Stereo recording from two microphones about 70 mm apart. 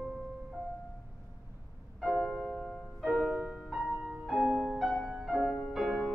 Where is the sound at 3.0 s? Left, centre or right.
Centre.